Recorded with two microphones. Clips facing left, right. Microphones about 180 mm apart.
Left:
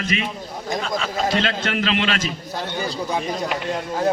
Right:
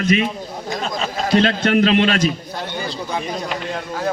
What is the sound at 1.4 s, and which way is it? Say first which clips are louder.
Speech: right 7 dB; 45° right (ahead or behind).